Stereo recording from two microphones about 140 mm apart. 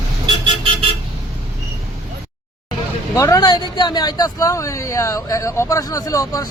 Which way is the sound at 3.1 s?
25° left (ahead or behind).